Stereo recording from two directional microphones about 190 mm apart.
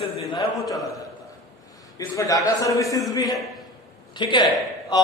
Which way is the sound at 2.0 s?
15° left (ahead or behind).